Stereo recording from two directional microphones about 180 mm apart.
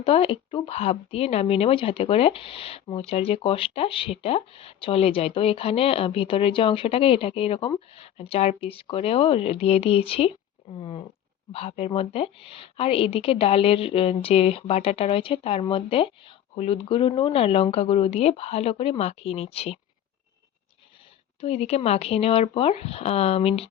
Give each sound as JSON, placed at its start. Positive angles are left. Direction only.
{"t": 0.0, "sound": "a woman's voice", "side_deg": 30}
{"t": 21.4, "sound": "a woman's voice", "side_deg": 35}